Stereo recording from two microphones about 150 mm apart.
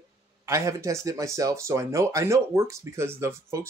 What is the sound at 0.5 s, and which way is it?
Speech, 20° right (ahead or behind).